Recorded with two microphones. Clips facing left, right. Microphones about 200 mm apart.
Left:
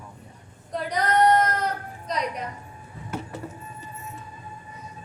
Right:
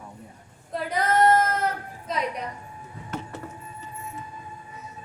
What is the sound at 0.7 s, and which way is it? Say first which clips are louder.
Female singing: even; 5° right (ahead or behind).